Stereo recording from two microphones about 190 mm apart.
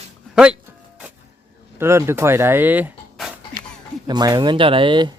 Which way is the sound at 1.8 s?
15° right (ahead or behind).